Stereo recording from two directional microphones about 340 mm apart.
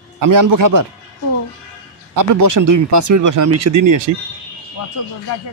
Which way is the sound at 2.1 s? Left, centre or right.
Right.